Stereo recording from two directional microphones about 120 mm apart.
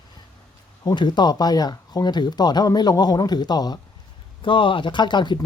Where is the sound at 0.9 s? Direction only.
40° left (ahead or behind).